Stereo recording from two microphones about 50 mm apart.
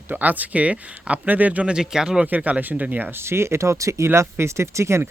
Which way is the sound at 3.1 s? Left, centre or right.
Right.